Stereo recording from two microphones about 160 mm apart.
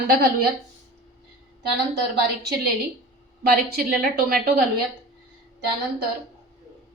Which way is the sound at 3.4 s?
75° right (ahead or behind).